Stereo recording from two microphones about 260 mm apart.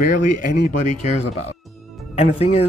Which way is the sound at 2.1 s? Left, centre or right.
Left.